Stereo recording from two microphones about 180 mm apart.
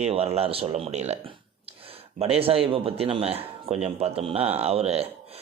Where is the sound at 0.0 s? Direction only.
35° right (ahead or behind).